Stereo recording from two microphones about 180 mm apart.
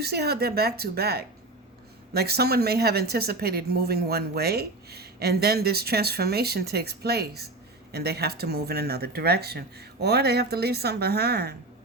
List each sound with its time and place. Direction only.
0.0 s a woman's voice: 60° right (ahead or behind)